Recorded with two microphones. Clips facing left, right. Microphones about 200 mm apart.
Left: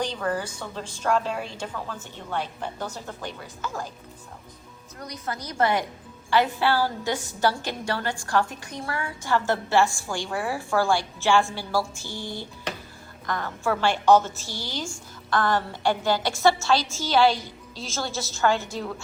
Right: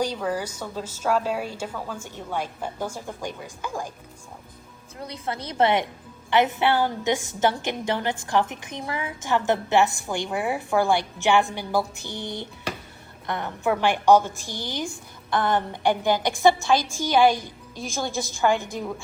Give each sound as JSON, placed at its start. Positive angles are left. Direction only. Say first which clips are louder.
{"t": 0.0, "sound": "a woman's voice", "louder": "right 2 dB", "side_deg": -10}
{"t": 4.9, "sound": "a woman's voice", "louder": "right 2 dB", "side_deg": -30}
{"t": 17.3, "sound": "a woman's voice", "louder": "right 2 dB", "side_deg": -50}
{"t": 17.8, "sound": "a woman's voice", "louder": "right 3 dB", "side_deg": -15}